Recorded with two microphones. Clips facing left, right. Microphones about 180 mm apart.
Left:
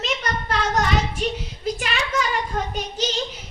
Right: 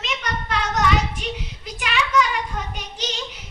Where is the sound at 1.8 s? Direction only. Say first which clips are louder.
Right 8 dB; 40° left (ahead or behind).